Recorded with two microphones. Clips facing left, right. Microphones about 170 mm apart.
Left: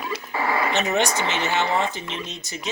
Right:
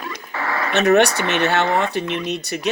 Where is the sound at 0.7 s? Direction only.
65° right (ahead or behind).